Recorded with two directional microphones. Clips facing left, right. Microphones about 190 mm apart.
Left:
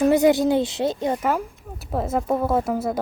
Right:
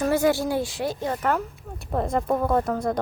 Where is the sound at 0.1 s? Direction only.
20° left (ahead or behind).